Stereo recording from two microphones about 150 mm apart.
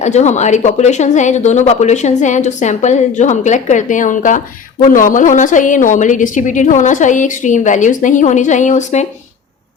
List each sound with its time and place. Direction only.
0.0 s a woman's voice: 50° left (ahead or behind)